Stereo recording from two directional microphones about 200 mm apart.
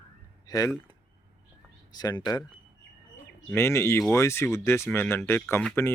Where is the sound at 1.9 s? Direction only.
20° left (ahead or behind).